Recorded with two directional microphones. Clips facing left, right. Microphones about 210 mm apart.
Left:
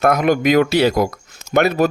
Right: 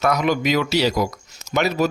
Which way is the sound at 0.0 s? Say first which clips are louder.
Left 5 dB; 50° left (ahead or behind).